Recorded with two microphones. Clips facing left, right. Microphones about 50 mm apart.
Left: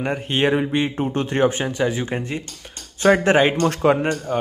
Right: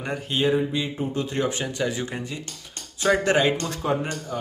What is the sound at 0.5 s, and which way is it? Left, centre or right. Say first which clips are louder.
Speech: left 2 dB; left.